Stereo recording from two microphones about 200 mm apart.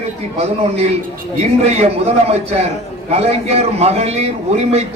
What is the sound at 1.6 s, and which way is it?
A man's voice, 30° right (ahead or behind).